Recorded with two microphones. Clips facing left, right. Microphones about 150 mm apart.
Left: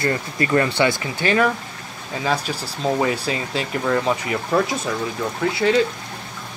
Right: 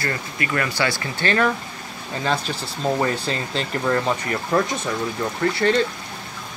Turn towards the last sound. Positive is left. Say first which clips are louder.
# left 1 dB
turn(degrees=5)  # may be behind; listen again after turning